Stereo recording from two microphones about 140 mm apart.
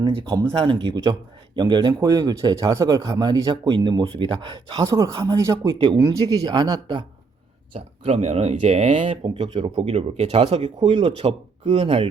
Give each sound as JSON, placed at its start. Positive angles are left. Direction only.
{"t": 0.1, "sound": "speech", "side_deg": -35}
{"t": 3.7, "sound": "speech", "side_deg": -35}
{"t": 7.7, "sound": "speech", "side_deg": -50}